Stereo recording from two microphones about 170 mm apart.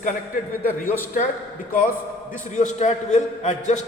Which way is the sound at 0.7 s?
10° left (ahead or behind).